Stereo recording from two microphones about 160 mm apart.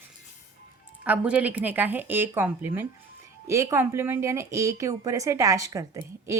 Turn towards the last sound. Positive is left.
turn(degrees=-20)  # may be behind; listen again after turning